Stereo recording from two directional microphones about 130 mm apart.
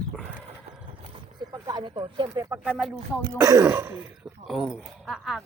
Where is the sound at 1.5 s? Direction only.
30° right (ahead or behind).